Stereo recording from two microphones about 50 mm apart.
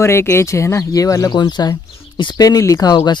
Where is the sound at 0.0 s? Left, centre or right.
Left.